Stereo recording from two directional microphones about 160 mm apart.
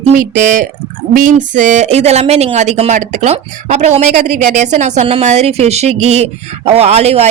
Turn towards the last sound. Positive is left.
turn(degrees=-40)  # may be behind; listen again after turning